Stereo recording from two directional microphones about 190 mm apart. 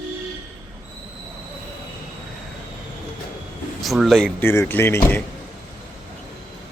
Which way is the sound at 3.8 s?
Centre (ahead or behind).